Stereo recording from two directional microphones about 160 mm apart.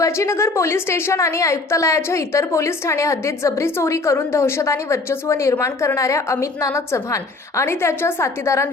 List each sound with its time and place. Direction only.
0.0 s a woman's voice: 15° left (ahead or behind)